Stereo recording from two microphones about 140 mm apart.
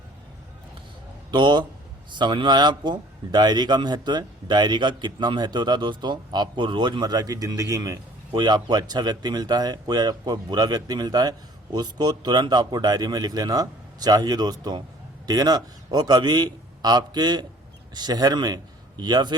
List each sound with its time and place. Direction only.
1.3 s a man's voice: 35° right (ahead or behind)